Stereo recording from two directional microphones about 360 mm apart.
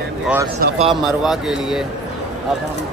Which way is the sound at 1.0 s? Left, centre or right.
Centre.